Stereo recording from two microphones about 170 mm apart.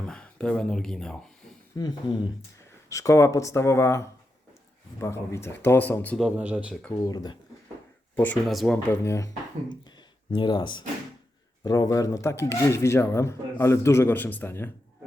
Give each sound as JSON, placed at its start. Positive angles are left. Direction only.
{"t": 0.0, "sound": "speech", "side_deg": 5}
{"t": 1.7, "sound": "speech", "side_deg": 25}
{"t": 6.1, "sound": "a man's voice", "side_deg": -5}
{"t": 6.9, "sound": "speech", "side_deg": 20}
{"t": 8.1, "sound": "speech", "side_deg": 10}
{"t": 8.9, "sound": "speech", "side_deg": 15}